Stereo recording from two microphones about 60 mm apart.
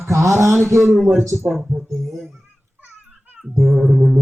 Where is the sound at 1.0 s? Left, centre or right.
Right.